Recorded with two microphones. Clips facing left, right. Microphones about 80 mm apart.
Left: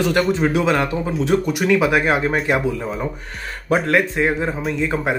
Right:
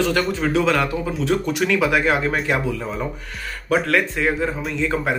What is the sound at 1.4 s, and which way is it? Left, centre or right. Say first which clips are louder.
Speech: left 2 dB; centre.